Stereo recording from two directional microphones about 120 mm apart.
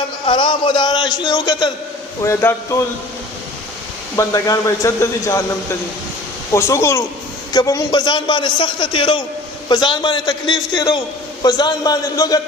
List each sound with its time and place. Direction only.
0.3 s a man's voice: 40° left (ahead or behind)
2.2 s speech: 25° left (ahead or behind)
4.2 s speech: 25° left (ahead or behind)
6.5 s a man's voice: 25° left (ahead or behind)